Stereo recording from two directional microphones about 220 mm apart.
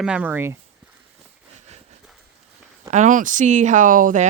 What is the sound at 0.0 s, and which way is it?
Speech, 5° right (ahead or behind).